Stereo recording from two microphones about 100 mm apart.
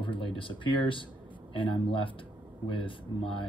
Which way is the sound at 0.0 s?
60° left (ahead or behind).